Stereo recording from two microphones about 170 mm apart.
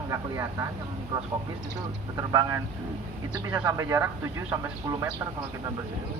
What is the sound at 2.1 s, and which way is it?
Speech, 20° right (ahead or behind).